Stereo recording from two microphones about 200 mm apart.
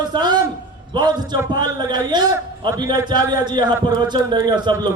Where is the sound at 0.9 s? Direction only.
20° right (ahead or behind).